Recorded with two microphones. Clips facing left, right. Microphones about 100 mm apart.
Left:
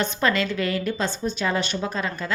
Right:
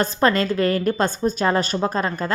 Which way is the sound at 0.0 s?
40° right (ahead or behind).